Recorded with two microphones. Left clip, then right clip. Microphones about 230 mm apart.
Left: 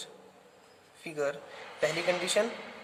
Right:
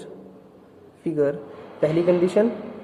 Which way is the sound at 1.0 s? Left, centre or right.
Centre.